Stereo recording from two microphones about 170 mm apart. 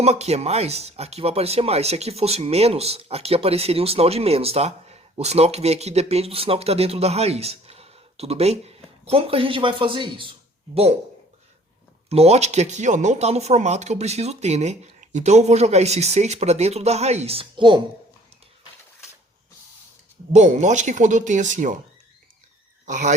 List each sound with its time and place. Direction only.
0.0 s speech: 40° right (ahead or behind)
12.0 s speech: 35° right (ahead or behind)
20.3 s speech: 45° right (ahead or behind)
22.9 s speech: 45° right (ahead or behind)